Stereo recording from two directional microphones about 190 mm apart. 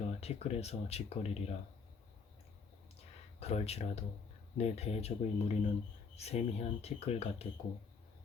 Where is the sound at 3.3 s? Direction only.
35° left (ahead or behind).